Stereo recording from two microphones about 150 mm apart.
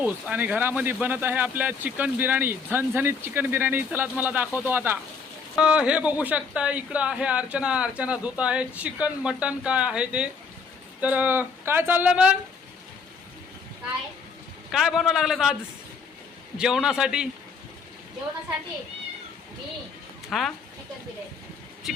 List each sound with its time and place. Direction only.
0.0 s speech: 10° right (ahead or behind)
14.7 s a man's voice: centre (ahead or behind)
16.6 s a man's voice: 5° right (ahead or behind)
20.3 s a man's voice: 5° left (ahead or behind)